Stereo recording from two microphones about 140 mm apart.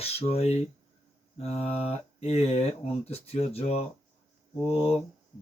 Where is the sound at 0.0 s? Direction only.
45° left (ahead or behind).